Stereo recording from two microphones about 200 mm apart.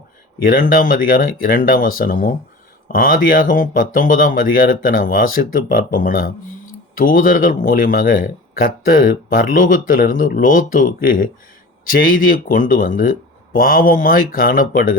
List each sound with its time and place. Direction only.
0.4 s speech: 45° left (ahead or behind)